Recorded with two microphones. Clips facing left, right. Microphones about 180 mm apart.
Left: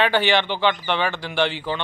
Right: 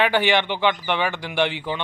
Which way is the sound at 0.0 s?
15° right (ahead or behind).